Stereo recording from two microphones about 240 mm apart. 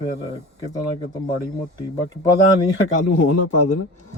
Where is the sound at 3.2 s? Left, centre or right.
Left.